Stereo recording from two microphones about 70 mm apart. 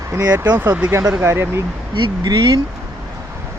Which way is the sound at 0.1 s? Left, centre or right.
Right.